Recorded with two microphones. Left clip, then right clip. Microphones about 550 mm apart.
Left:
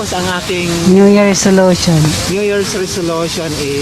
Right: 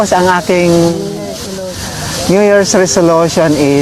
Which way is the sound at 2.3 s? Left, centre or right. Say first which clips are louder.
Right 9 dB; right.